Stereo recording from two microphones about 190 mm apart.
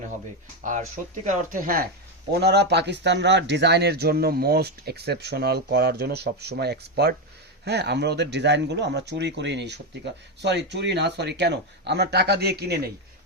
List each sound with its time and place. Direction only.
1.2 s speech: 45° right (ahead or behind)
2.3 s speech: 60° right (ahead or behind)